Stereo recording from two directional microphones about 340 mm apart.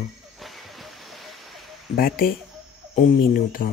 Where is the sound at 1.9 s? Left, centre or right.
Left.